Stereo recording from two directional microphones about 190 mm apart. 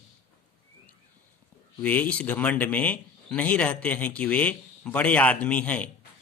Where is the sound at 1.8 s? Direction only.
10° left (ahead or behind).